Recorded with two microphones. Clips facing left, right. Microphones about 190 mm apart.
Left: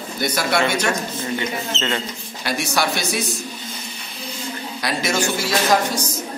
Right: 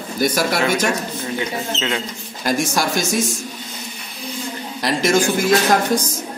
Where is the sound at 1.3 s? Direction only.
5° right (ahead or behind).